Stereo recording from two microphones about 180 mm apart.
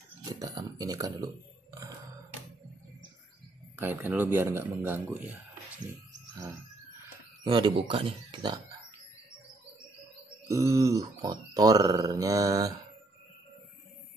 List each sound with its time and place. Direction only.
0.2 s speech: 20° right (ahead or behind)
3.7 s speech: 10° right (ahead or behind)
7.4 s speech: 25° right (ahead or behind)
10.5 s speech: 15° right (ahead or behind)